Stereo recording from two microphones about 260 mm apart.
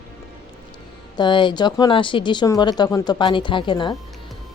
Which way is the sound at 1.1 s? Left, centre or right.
Centre.